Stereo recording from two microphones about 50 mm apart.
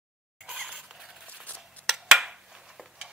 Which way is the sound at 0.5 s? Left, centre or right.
Centre.